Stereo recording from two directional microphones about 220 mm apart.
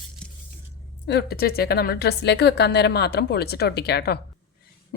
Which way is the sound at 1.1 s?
45° left (ahead or behind).